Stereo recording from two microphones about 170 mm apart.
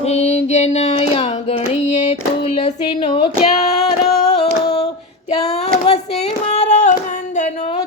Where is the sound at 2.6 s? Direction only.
30° left (ahead or behind).